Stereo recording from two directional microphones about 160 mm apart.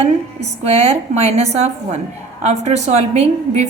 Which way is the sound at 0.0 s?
40° right (ahead or behind).